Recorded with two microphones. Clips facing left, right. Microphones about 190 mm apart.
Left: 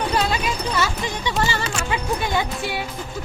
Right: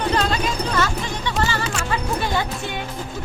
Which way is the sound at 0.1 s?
10° left (ahead or behind).